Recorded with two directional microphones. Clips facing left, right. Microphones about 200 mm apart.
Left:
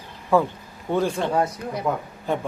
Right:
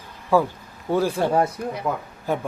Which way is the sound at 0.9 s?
5° right (ahead or behind).